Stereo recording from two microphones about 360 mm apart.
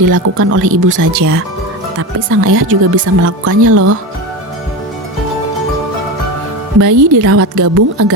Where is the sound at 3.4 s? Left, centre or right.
Right.